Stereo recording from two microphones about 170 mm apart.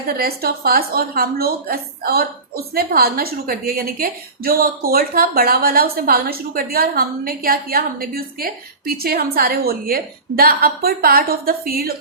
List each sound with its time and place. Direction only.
0.1 s a woman's voice: 60° right (ahead or behind)